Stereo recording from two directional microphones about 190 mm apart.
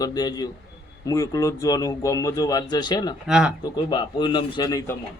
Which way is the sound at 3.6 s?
25° left (ahead or behind).